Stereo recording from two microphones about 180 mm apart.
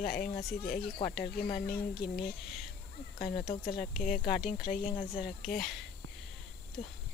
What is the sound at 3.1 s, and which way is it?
Speech, 50° left (ahead or behind).